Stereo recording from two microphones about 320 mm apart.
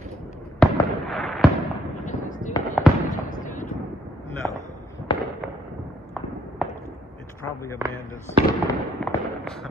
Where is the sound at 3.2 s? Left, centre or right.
Left.